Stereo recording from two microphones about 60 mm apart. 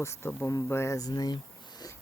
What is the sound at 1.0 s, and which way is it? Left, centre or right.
Speech, left.